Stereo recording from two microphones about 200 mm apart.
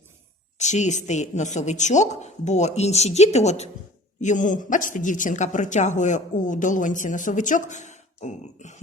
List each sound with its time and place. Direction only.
0.6 s a woman's voice: 35° left (ahead or behind)